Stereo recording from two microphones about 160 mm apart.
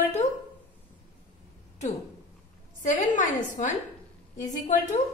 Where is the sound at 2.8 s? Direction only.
55° left (ahead or behind).